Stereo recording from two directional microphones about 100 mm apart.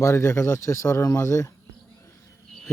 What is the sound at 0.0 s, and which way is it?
A man's voice, 25° left (ahead or behind).